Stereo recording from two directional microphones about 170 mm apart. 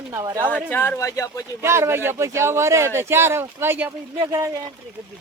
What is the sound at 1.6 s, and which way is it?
Speech, 15° right (ahead or behind).